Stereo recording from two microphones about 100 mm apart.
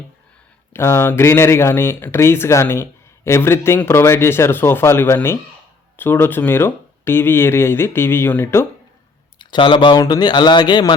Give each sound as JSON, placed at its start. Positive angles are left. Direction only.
{"t": 0.7, "sound": "speech", "side_deg": 25}
{"t": 9.4, "sound": "speech", "side_deg": 55}
{"t": 10.0, "sound": "speech", "side_deg": 45}